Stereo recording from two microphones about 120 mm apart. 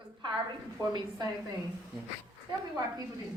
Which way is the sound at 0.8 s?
30° right (ahead or behind).